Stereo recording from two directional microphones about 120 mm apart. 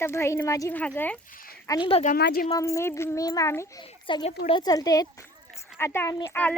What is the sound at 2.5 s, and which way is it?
A child's voice, 25° left (ahead or behind).